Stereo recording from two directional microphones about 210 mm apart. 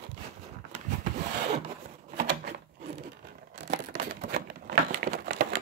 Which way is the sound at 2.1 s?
45° right (ahead or behind).